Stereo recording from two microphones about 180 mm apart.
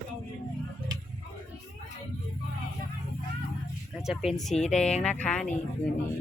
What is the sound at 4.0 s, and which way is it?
A woman's voice, centre (ahead or behind).